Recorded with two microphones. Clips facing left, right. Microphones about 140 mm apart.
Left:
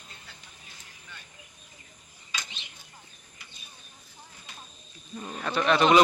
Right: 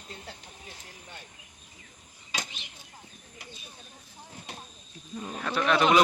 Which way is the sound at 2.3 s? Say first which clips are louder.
Right 3 dB; 75° right (ahead or behind).